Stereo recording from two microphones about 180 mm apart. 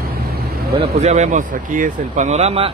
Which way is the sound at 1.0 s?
40° right (ahead or behind).